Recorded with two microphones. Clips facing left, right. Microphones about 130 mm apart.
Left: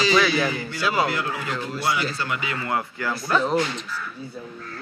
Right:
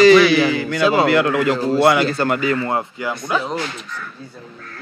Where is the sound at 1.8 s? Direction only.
60° right (ahead or behind); by 2.9 s 30° right (ahead or behind).